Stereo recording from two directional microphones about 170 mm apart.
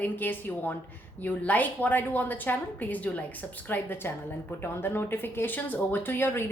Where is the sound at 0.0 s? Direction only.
10° left (ahead or behind).